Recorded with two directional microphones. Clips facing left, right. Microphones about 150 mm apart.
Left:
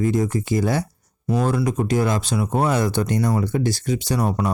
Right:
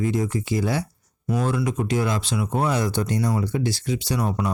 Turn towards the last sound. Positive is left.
turn(degrees=40)  # may be behind; listen again after turning